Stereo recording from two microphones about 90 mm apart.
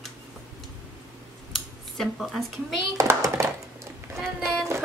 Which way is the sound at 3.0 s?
35° right (ahead or behind).